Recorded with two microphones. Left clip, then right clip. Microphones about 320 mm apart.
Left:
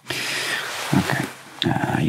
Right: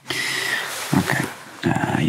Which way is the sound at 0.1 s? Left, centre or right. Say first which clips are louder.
Right 2 dB; left.